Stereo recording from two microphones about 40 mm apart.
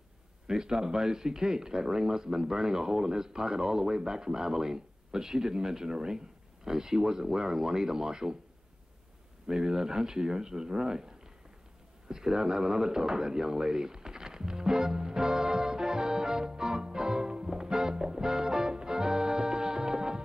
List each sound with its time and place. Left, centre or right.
0.5 s speech: centre
9.5 s speech: centre
12.1 s a sound: centre